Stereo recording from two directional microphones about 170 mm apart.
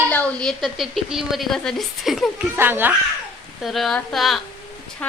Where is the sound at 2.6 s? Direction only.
10° right (ahead or behind).